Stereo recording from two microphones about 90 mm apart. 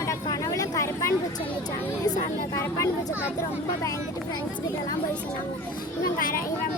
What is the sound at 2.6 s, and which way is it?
Speech, 30° left (ahead or behind).